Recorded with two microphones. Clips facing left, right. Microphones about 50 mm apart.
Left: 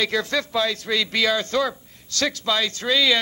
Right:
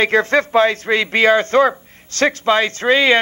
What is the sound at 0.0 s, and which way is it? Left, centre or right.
Speech, right.